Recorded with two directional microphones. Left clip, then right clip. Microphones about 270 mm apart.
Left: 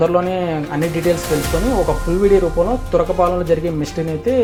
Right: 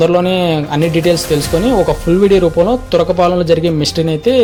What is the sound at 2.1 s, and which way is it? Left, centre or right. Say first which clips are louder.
A man's voice: right 4 dB; right.